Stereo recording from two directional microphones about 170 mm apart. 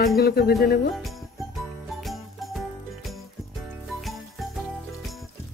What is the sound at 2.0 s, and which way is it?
Music, centre (ahead or behind).